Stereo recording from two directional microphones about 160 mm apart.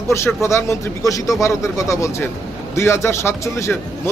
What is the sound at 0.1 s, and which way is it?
A man's voice, 15° left (ahead or behind).